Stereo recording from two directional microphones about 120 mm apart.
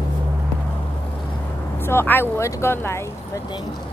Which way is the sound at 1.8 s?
20° left (ahead or behind).